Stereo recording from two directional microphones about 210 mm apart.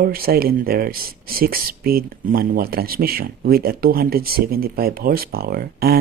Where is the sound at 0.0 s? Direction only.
45° right (ahead or behind).